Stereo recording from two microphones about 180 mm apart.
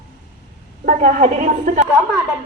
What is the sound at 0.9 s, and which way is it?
Speech, 45° right (ahead or behind).